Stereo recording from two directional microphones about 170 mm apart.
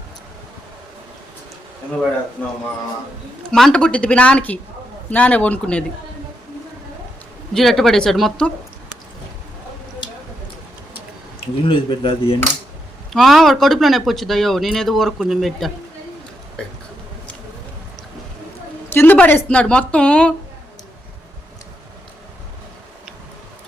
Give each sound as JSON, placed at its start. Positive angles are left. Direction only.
{"t": 3.5, "sound": "a woman's voice", "side_deg": 5}
{"t": 7.5, "sound": "speech", "side_deg": 0}
{"t": 11.3, "sound": "speech", "side_deg": 30}
{"t": 13.1, "sound": "speech", "side_deg": 0}
{"t": 18.9, "sound": "a woman's voice", "side_deg": 10}